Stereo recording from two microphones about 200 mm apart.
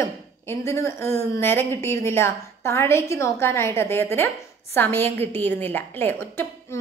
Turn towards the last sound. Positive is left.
turn(degrees=10)  # may be behind; listen again after turning